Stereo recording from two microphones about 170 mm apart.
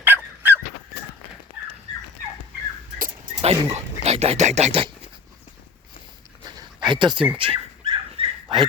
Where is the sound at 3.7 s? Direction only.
40° right (ahead or behind).